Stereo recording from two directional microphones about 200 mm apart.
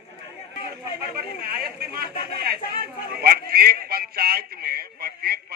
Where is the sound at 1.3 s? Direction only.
50° right (ahead or behind).